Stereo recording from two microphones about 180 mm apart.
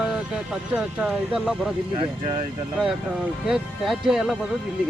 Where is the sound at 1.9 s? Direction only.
30° right (ahead or behind).